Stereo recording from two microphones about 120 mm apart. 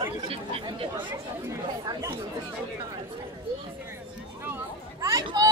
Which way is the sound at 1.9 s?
25° right (ahead or behind).